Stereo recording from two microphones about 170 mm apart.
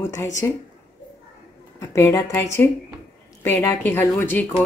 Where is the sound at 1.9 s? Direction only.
15° left (ahead or behind).